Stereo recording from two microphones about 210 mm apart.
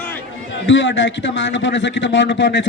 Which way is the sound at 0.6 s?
65° left (ahead or behind).